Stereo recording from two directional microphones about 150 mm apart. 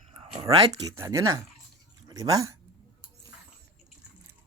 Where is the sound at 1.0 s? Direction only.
20° right (ahead or behind).